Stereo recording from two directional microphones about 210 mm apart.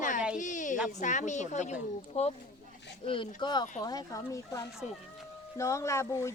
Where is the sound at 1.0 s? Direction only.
35° left (ahead or behind).